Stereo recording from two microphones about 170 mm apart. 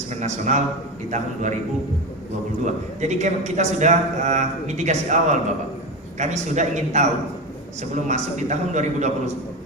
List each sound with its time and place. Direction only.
0.1 s a man's voice: 45° right (ahead or behind)
2.6 s a man's voice: 40° right (ahead or behind)